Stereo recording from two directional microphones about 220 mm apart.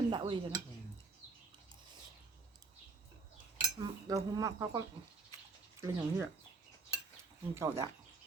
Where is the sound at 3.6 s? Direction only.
20° right (ahead or behind).